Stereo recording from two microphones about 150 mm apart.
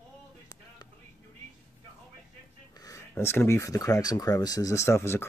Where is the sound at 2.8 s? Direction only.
20° left (ahead or behind).